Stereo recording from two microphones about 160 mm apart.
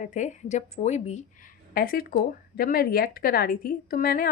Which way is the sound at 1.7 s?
65° left (ahead or behind).